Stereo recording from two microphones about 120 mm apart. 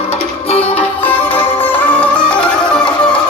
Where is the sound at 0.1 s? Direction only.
60° left (ahead or behind).